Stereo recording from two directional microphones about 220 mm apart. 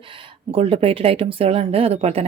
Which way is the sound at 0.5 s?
25° right (ahead or behind).